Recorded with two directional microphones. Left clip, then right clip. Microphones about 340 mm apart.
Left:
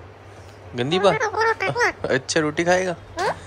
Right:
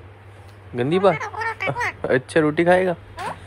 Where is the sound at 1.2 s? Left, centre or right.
Left.